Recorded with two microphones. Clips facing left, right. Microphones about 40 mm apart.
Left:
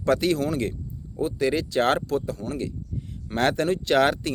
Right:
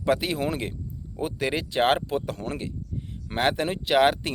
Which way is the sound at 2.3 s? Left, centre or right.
Right.